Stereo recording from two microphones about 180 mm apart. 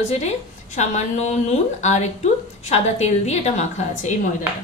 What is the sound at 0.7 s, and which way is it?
A woman's voice, 40° left (ahead or behind).